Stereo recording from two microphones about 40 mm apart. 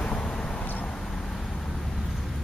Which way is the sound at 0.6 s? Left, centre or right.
Left.